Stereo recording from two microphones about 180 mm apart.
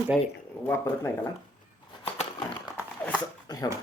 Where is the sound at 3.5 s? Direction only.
20° left (ahead or behind).